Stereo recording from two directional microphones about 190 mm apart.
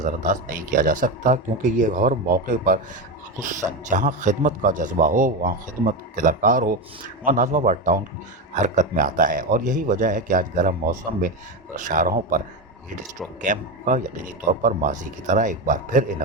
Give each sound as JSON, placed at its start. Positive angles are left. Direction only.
{"t": 0.0, "sound": "a man's voice", "side_deg": -45}
{"t": 13.4, "sound": "a man's voice", "side_deg": -40}